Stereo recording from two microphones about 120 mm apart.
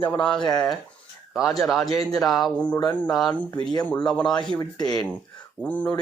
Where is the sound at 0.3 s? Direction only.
35° left (ahead or behind).